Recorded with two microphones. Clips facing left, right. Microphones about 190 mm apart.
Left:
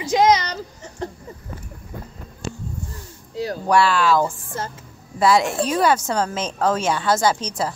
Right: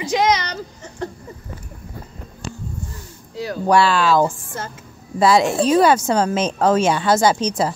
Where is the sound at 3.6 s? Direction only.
30° right (ahead or behind).